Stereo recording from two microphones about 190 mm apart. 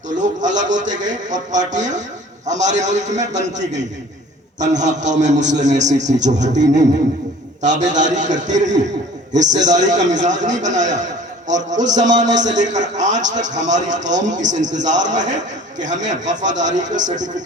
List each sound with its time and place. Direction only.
0.2 s a man's voice: 40° right (ahead or behind)